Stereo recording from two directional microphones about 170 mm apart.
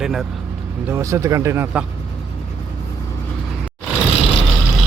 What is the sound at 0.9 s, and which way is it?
Speech, 20° right (ahead or behind).